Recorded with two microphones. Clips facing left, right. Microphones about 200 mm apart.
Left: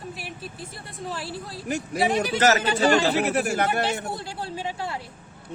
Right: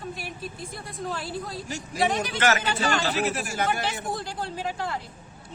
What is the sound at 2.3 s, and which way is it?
Speech, 40° left (ahead or behind).